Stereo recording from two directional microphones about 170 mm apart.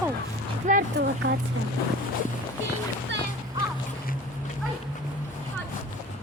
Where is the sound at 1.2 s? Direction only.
90° right.